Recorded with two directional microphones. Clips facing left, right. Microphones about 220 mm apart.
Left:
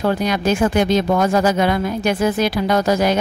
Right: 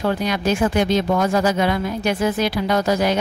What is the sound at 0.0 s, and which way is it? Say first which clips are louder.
Speech: left 2 dB; 45° left (ahead or behind).